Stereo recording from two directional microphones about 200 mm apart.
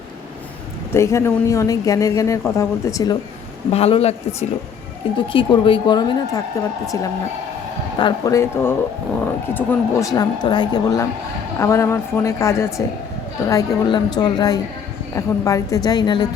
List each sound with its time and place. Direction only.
0.9 s speech: 15° left (ahead or behind)
3.7 s a man's voice: 30° left (ahead or behind)
5.1 s a woman's voice: 25° left (ahead or behind)
7.9 s a woman's voice: 20° left (ahead or behind)